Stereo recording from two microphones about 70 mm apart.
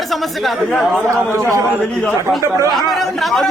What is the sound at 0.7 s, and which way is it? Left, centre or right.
Speech, centre.